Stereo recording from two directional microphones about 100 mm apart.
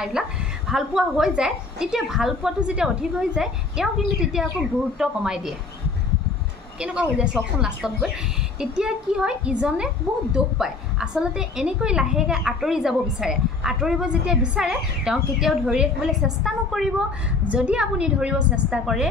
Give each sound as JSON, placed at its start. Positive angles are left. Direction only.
{"t": 0.2, "sound": "a woman's voice", "side_deg": -5}
{"t": 6.8, "sound": "a woman's voice", "side_deg": -10}